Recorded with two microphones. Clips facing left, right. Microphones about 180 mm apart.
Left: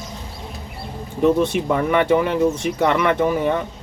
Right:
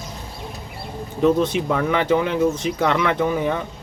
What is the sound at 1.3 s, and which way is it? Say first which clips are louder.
Speech: left 1 dB; 55° left (ahead or behind).